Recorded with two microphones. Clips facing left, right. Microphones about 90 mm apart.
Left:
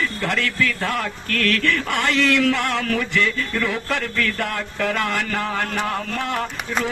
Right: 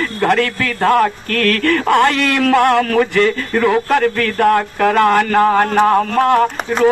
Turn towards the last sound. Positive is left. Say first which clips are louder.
# right 11 dB
turn(degrees=-50)  # may be behind; listen again after turning